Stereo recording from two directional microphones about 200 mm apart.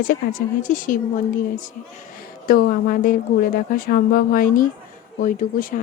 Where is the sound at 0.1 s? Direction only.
40° left (ahead or behind).